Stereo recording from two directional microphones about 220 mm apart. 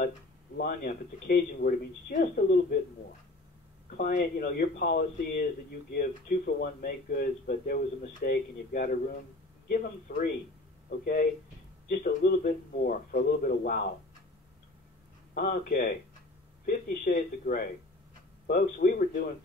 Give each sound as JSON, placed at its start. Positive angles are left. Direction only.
{"t": 0.6, "sound": "speech", "side_deg": 45}
{"t": 3.9, "sound": "speech", "side_deg": 45}
{"t": 11.9, "sound": "speech", "side_deg": 40}
{"t": 15.3, "sound": "speech", "side_deg": 45}